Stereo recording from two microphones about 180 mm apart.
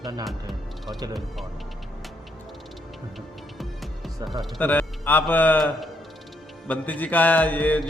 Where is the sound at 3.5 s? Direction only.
Centre (ahead or behind).